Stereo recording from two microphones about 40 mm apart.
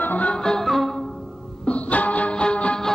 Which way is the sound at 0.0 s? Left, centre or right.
Left.